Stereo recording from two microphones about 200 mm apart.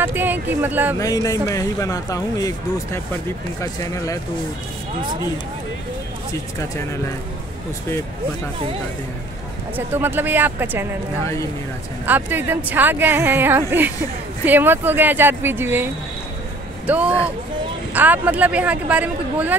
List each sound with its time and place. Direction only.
0.0 s a woman's voice: 10° right (ahead or behind)
0.9 s speech: 15° left (ahead or behind)
9.8 s a woman's voice: 10° right (ahead or behind)
12.1 s a woman's voice: 10° right (ahead or behind)